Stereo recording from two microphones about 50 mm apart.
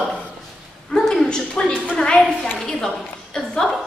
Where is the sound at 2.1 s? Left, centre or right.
Centre.